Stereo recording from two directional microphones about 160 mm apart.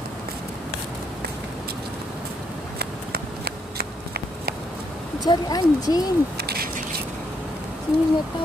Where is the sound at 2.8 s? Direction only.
75° right (ahead or behind).